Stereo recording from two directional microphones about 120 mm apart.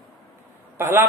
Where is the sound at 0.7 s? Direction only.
25° right (ahead or behind).